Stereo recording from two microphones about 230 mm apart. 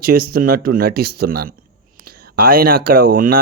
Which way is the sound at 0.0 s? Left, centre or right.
Right.